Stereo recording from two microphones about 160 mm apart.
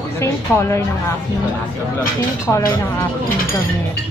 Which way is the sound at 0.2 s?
15° left (ahead or behind).